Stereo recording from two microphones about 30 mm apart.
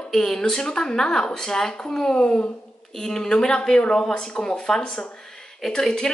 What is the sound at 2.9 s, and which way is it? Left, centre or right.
A woman's voice, centre.